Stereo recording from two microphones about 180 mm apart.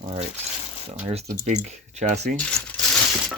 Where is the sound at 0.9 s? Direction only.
35° right (ahead or behind).